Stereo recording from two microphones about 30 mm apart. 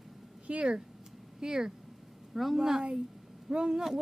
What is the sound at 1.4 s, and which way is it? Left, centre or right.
Speech, right.